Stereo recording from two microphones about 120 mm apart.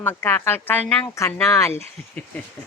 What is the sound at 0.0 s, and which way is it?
Speech, 20° left (ahead or behind).